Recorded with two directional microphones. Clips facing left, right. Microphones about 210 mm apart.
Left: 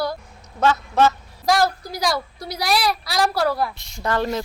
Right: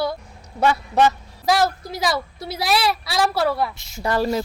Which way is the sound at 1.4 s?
Centre (ahead or behind).